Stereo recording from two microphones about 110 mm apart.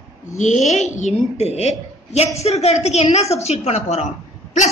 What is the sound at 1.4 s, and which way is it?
A woman's voice, 75° left (ahead or behind).